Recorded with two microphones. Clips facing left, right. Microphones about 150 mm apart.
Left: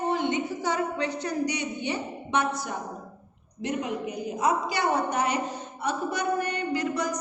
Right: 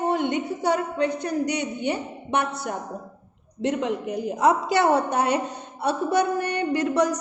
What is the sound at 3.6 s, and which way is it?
A woman's voice, 80° right.